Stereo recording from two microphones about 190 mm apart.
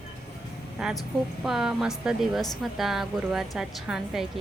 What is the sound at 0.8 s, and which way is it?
A woman's voice, 5° right (ahead or behind).